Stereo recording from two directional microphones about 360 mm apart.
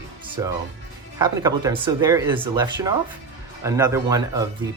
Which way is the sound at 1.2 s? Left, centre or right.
Centre.